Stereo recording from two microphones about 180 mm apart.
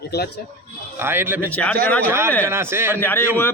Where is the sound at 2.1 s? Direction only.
15° right (ahead or behind).